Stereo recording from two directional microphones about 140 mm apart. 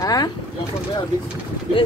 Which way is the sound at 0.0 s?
25° left (ahead or behind).